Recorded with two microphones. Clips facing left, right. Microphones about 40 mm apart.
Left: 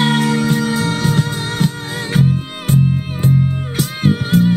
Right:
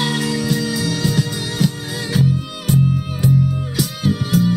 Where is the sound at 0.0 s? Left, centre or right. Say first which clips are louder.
Left 5 dB; left.